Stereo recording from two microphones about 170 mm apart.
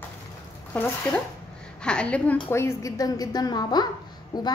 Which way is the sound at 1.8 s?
5° left (ahead or behind).